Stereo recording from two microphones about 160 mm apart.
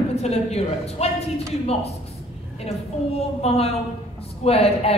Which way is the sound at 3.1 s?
40° left (ahead or behind).